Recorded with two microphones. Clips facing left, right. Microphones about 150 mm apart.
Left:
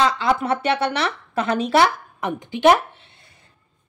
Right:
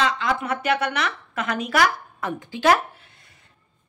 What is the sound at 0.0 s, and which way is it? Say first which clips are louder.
Speech: left 4 dB; 35° left (ahead or behind).